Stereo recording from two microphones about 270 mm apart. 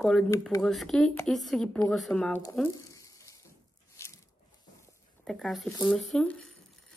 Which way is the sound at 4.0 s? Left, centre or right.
Centre.